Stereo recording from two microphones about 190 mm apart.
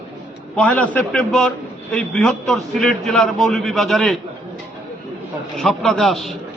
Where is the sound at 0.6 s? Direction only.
5° left (ahead or behind).